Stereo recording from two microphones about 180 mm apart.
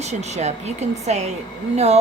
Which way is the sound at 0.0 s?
40° right (ahead or behind).